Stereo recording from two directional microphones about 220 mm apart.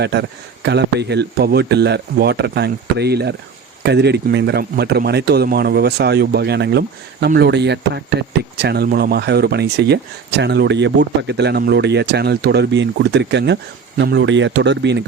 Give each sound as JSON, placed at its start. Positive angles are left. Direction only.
{"t": 0.0, "sound": "speech", "side_deg": -50}